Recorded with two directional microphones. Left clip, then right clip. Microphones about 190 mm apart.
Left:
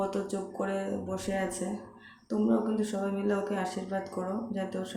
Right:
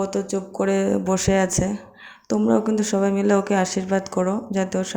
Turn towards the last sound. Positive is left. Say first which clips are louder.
# right 11 dB
turn(degrees=-45)  # may be behind; listen again after turning